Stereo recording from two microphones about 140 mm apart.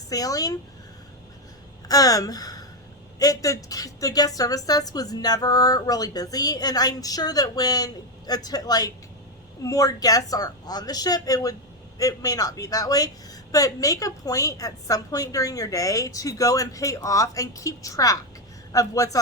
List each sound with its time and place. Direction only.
0.1 s speech: 25° left (ahead or behind)
1.9 s speech: 25° left (ahead or behind)